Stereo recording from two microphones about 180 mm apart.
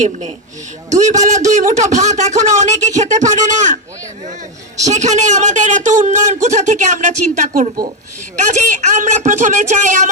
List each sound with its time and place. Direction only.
0.9 s speech: 40° right (ahead or behind)
4.9 s speech: 40° right (ahead or behind)